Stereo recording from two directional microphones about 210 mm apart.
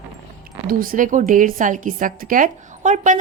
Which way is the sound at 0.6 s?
40° right (ahead or behind).